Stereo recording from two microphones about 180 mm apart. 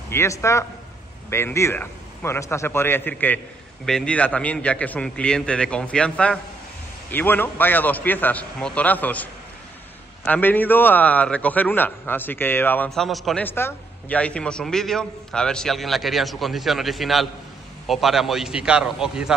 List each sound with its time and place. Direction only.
0.1 s a man's voice: 15° left (ahead or behind); by 19.3 s 5° right (ahead or behind)